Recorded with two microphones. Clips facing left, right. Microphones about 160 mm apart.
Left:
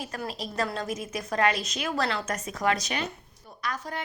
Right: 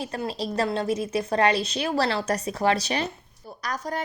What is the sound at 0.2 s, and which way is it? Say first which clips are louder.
Speech: right 4 dB; 30° right (ahead or behind).